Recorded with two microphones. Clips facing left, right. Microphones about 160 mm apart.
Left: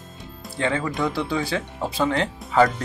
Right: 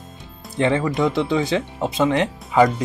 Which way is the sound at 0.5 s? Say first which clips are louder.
Right 5 dB; 20° right (ahead or behind).